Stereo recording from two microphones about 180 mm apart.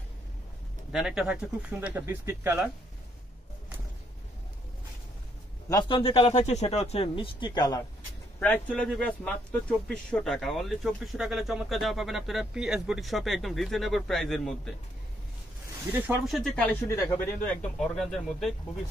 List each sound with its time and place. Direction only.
0.9 s speech: 5° right (ahead or behind)
5.7 s a man's voice: 25° left (ahead or behind)
8.4 s speech: 5° left (ahead or behind)
16.3 s speech: centre (ahead or behind)